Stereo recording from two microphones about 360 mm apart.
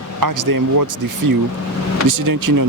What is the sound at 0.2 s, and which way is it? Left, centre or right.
Speech, right.